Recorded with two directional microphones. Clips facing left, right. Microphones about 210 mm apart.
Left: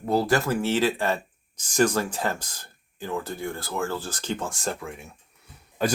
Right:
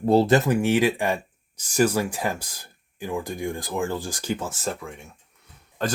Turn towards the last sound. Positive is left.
turn(degrees=10)  # may be behind; listen again after turning